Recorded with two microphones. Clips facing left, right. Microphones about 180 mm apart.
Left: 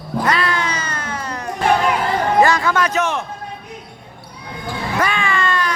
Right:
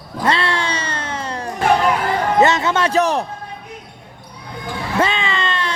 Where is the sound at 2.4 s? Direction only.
25° right (ahead or behind).